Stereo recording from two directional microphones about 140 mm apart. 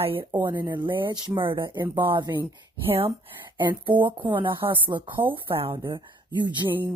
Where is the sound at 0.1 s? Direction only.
35° right (ahead or behind).